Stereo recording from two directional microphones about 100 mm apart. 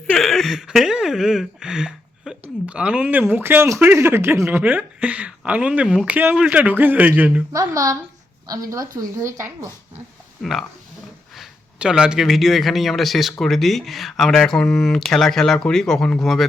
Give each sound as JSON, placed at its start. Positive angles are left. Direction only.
{"t": 0.1, "sound": "speech", "side_deg": 0}
{"t": 7.5, "sound": "a woman's voice", "side_deg": -35}
{"t": 10.4, "sound": "a man's voice", "side_deg": 0}